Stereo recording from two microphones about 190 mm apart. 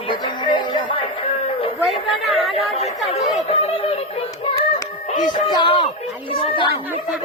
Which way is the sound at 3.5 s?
30° left (ahead or behind).